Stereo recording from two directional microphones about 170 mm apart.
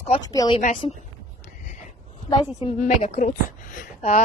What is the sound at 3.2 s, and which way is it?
Speech, 50° left (ahead or behind).